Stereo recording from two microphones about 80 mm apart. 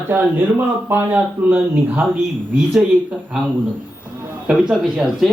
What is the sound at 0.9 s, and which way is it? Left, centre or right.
Speech, right.